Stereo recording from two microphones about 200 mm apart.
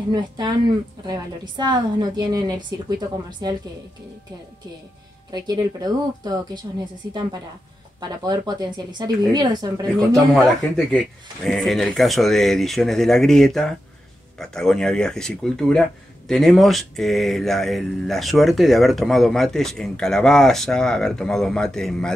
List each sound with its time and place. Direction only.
0.1 s a woman's voice: 20° right (ahead or behind)
5.3 s a woman's voice: 20° right (ahead or behind)
8.0 s a woman's voice: 20° right (ahead or behind)
10.8 s speech: 5° left (ahead or behind)